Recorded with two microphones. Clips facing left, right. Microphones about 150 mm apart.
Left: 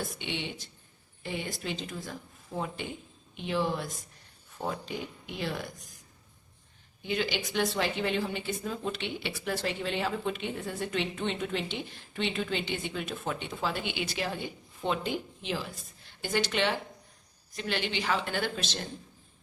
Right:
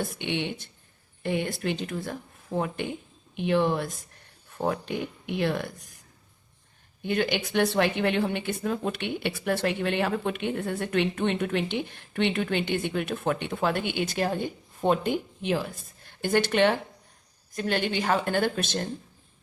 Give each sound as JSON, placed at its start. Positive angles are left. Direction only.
{"t": 0.0, "sound": "speech", "side_deg": -60}
{"t": 7.0, "sound": "a woman's voice", "side_deg": -55}